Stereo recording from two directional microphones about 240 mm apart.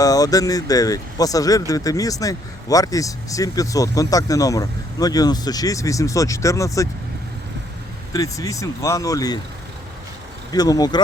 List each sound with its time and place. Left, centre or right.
0.0 s speech: centre
8.1 s speech: centre
10.5 s speech: centre